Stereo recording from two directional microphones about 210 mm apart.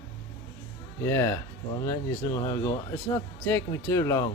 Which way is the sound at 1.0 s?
15° left (ahead or behind).